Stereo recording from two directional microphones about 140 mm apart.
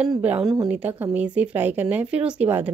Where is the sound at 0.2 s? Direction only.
10° right (ahead or behind).